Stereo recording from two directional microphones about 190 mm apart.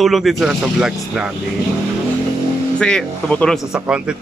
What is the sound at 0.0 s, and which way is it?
Speech, centre (ahead or behind).